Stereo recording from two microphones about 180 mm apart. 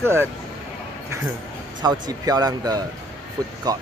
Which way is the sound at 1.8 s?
25° right (ahead or behind).